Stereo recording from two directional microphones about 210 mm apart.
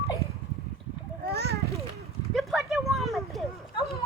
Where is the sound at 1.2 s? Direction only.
50° right (ahead or behind).